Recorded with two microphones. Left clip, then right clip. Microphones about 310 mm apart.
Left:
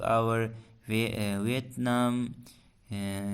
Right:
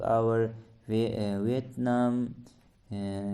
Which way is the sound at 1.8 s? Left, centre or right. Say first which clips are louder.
Even; left.